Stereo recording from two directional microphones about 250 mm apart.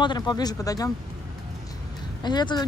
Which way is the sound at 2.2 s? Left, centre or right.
Centre.